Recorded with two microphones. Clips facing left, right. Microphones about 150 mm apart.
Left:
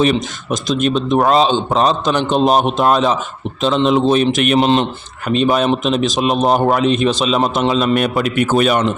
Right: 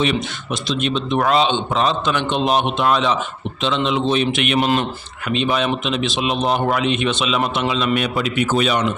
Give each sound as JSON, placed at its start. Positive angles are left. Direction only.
{"t": 0.0, "sound": "speech", "side_deg": 45}
{"t": 4.6, "sound": "speech", "side_deg": 25}
{"t": 5.3, "sound": "a man's voice", "side_deg": 40}